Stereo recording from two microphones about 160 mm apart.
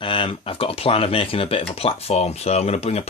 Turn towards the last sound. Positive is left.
turn(degrees=40)  # may be behind; listen again after turning